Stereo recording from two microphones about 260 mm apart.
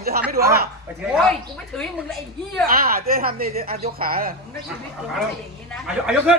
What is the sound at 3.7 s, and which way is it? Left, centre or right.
Speech, right.